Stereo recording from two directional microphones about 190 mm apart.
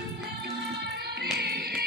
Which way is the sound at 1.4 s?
55° right (ahead or behind).